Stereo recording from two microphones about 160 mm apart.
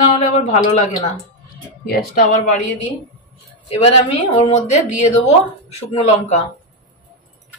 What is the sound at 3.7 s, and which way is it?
A woman's voice, 40° left (ahead or behind).